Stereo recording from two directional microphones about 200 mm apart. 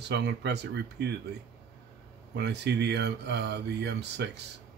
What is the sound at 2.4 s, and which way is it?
Speech, 55° right (ahead or behind).